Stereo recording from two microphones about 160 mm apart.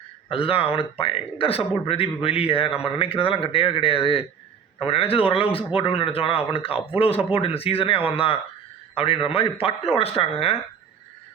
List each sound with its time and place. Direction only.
0.3 s a man's voice: 35° left (ahead or behind)